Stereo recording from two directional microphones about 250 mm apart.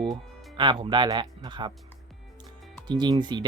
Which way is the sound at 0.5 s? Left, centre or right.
Centre.